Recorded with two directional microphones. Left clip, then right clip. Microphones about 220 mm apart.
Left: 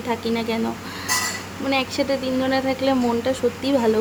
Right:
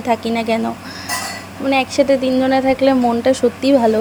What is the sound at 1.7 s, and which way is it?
A woman's voice, 20° right (ahead or behind).